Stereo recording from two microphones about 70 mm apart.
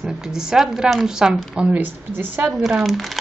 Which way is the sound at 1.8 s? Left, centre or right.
Right.